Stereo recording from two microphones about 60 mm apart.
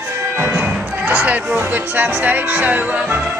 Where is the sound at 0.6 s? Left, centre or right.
Right.